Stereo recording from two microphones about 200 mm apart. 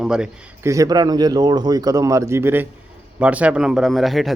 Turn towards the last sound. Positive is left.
turn(degrees=0)  # may be behind; listen again after turning